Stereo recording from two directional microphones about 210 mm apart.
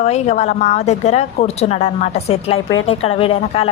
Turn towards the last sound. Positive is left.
turn(degrees=30)  # may be behind; listen again after turning